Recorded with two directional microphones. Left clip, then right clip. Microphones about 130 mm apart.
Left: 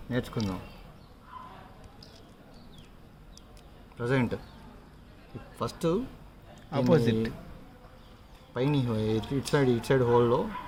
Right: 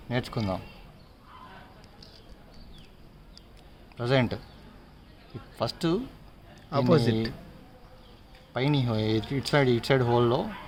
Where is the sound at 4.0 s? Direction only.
75° right (ahead or behind).